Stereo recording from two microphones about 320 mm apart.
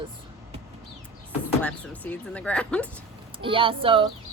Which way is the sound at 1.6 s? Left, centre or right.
Centre.